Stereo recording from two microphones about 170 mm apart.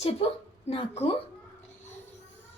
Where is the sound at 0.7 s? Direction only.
35° left (ahead or behind).